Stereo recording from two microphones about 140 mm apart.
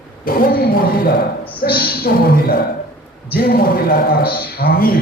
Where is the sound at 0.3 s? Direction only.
90° left.